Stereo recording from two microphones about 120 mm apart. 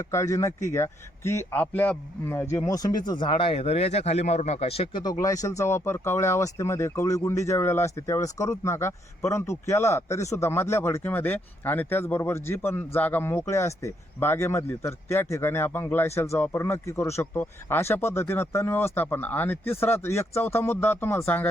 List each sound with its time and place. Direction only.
0.0 s speech: 25° left (ahead or behind); by 5.1 s 45° left (ahead or behind)
5.2 s speech: 30° left (ahead or behind)